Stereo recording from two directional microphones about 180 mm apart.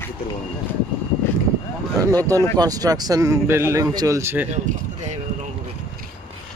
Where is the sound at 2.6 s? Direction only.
20° right (ahead or behind).